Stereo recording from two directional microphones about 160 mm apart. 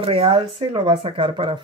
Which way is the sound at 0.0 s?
35° right (ahead or behind).